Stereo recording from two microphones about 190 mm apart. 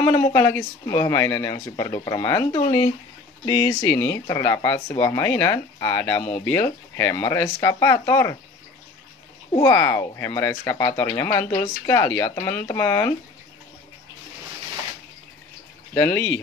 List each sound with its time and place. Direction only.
0.3 s speech: 10° left (ahead or behind)
2.5 s speech: 35° left (ahead or behind)
3.4 s speech: 20° left (ahead or behind)
3.8 s speech: 10° left (ahead or behind)
9.6 s speech: 15° left (ahead or behind)
15.9 s speech: 10° left (ahead or behind)